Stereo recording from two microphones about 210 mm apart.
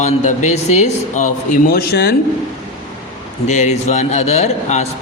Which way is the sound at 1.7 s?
45° left (ahead or behind).